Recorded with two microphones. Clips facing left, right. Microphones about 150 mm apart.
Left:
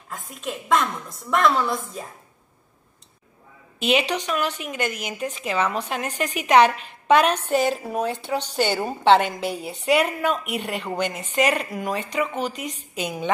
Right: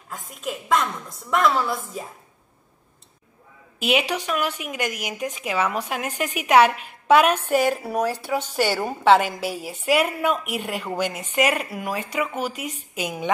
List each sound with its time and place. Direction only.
0.1 s a woman's voice: centre (ahead or behind)
3.8 s speech: 10° right (ahead or behind)
7.9 s speech: 20° left (ahead or behind)
8.4 s a woman's voice: 5° right (ahead or behind)